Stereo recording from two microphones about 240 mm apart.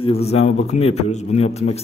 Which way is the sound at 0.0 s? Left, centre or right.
Left.